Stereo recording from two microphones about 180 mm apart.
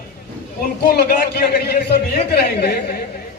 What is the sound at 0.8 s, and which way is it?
A man's voice, 60° left (ahead or behind).